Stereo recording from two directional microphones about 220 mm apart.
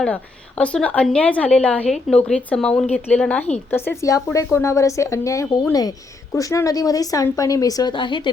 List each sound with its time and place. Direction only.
0.0 s a woman's voice: 5° left (ahead or behind); by 8.3 s 20° left (ahead or behind)